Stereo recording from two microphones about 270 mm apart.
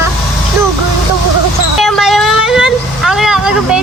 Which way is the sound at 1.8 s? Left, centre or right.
Centre.